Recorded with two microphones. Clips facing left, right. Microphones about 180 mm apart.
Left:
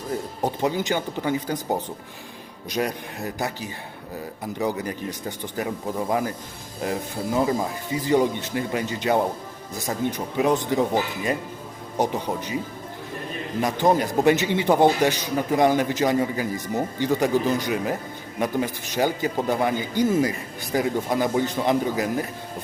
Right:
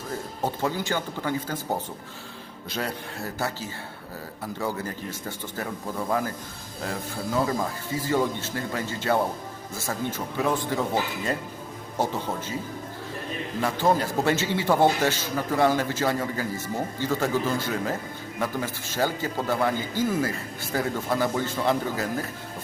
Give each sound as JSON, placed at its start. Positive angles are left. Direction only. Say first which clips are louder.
{"t": 0.4, "sound": "a man's voice", "louder": "left 3 dB", "side_deg": 15}
{"t": 13.6, "sound": "a man's voice", "louder": "left 3 dB", "side_deg": 15}